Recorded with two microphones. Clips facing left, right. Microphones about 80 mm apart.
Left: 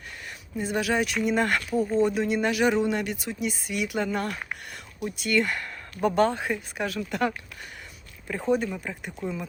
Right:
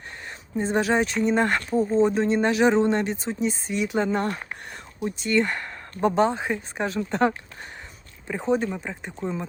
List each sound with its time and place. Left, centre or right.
0.5 s speech: right
6.1 s speech: centre
6.4 s speech: right
8.5 s speech: right